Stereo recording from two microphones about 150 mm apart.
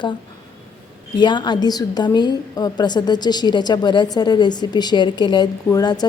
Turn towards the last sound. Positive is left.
turn(degrees=25)  # may be behind; listen again after turning